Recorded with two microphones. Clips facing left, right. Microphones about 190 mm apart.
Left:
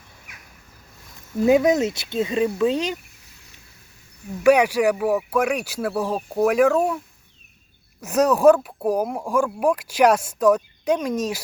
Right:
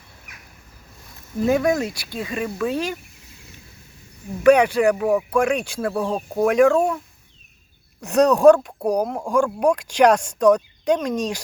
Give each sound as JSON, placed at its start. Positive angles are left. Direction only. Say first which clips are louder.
{"t": 1.5, "sound": "speech", "louder": "left 3 dB", "side_deg": 20}
{"t": 4.4, "sound": "speech", "louder": "right 2 dB", "side_deg": 10}
{"t": 8.0, "sound": "speech", "louder": "right 2 dB", "side_deg": 5}